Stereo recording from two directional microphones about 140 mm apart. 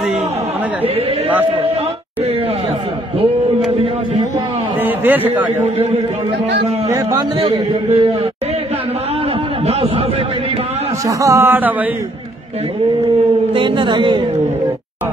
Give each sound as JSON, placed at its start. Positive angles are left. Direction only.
{"t": 4.8, "sound": "a man's voice", "side_deg": -15}
{"t": 6.9, "sound": "a man's voice", "side_deg": -20}
{"t": 7.3, "sound": "a man's voice", "side_deg": -40}
{"t": 11.1, "sound": "a man's voice", "side_deg": -20}
{"t": 13.6, "sound": "a man's voice", "side_deg": -35}